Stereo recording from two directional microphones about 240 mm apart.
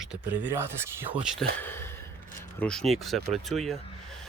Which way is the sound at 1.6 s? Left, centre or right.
Centre.